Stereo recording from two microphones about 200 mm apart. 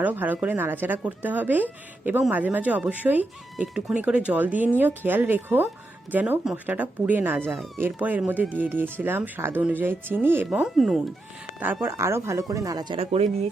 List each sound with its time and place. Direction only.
0.0 s speech: 10° right (ahead or behind); by 13.5 s 30° right (ahead or behind)